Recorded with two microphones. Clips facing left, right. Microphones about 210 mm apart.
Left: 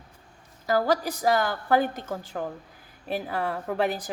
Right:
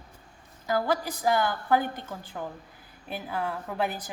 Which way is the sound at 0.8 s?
40° left (ahead or behind).